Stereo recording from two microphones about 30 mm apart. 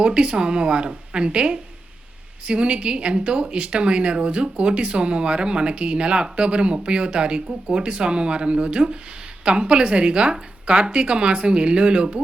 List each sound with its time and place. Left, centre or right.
0.0 s speech: right